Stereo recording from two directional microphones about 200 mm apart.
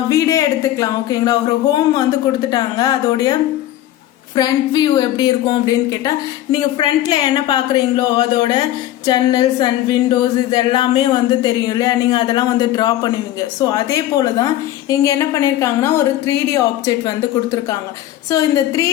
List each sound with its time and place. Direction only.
0.1 s speech: 15° left (ahead or behind)
4.4 s a woman's voice: 20° left (ahead or behind)
18.3 s a woman's voice: 15° left (ahead or behind)